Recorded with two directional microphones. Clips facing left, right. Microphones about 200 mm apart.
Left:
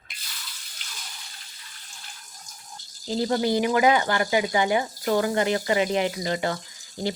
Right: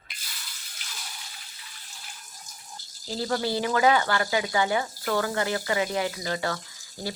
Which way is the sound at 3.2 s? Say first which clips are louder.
Left 4 dB; 15° left (ahead or behind).